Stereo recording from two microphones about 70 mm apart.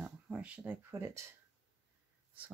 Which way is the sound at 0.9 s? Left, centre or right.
Right.